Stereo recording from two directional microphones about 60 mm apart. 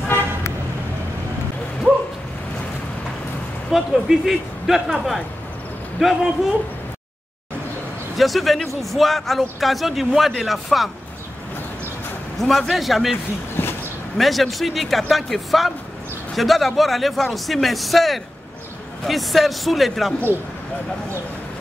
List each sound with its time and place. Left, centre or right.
3.7 s speech: centre
8.2 s speech: centre
12.4 s speech: centre
13.6 s a sound: left
14.1 s speech: centre